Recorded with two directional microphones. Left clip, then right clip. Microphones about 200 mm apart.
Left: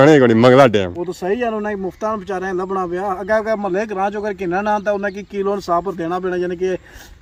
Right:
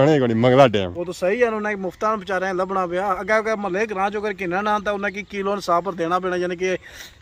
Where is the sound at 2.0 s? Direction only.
10° right (ahead or behind).